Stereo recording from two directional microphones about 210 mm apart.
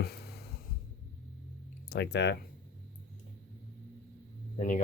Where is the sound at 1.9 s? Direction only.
55° left (ahead or behind).